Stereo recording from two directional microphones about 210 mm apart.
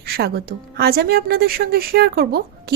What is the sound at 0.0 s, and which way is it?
A woman's voice, 50° right (ahead or behind).